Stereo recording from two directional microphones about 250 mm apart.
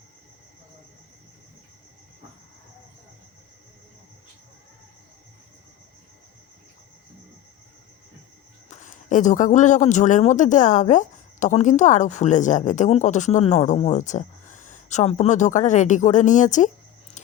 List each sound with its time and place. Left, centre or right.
8.7 s a man's voice: left